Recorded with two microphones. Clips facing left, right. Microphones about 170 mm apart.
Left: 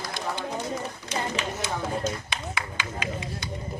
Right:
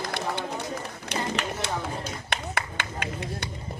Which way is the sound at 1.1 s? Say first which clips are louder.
Right 1 dB; 65° right (ahead or behind).